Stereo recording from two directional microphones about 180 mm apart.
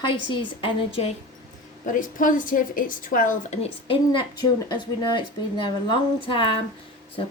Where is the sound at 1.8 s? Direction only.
45° left (ahead or behind).